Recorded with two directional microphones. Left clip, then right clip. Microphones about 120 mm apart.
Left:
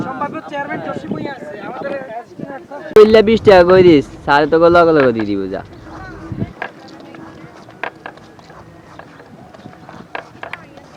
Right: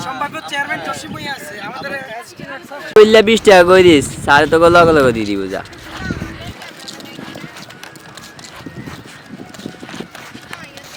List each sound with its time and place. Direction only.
0.0 s speech: 15° right (ahead or behind)